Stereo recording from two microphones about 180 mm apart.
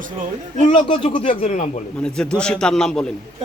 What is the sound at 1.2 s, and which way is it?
Speech, 40° left (ahead or behind).